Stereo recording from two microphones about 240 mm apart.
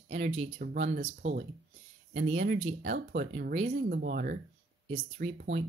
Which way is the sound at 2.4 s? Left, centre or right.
Right.